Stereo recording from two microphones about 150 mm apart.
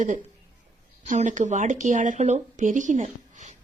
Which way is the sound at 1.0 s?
55° right (ahead or behind).